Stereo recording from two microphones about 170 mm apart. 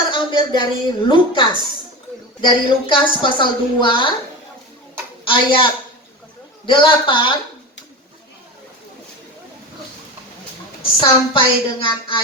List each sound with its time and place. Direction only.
0.1 s a woman's voice: 30° left (ahead or behind)
5.2 s a woman's voice: 30° left (ahead or behind)
6.7 s a woman's voice: 30° left (ahead or behind)
11.0 s a woman's voice: 30° left (ahead or behind)